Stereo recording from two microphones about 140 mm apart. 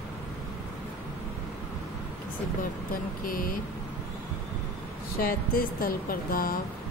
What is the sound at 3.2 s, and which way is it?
Speech, 85° left.